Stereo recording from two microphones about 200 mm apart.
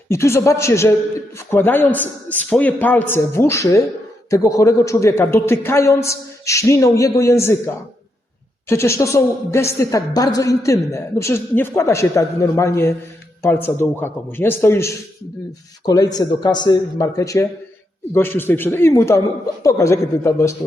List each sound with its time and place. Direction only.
0.1 s a woman's voice: 15° left (ahead or behind)
8.7 s a woman's voice: 15° left (ahead or behind)